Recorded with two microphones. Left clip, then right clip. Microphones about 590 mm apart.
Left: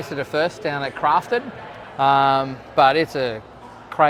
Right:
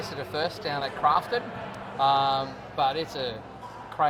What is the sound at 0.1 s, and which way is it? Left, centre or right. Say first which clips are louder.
Speech: left 10 dB; left.